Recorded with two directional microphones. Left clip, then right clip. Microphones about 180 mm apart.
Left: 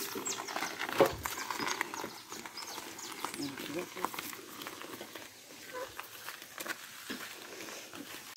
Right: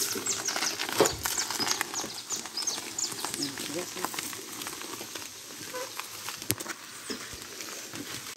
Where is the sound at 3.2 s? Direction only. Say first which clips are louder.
Right 5 dB; 5° right (ahead or behind).